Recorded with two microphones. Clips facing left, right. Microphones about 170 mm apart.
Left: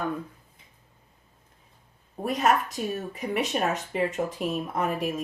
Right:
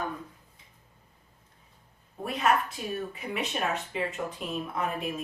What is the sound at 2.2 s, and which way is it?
Speech, 40° left (ahead or behind).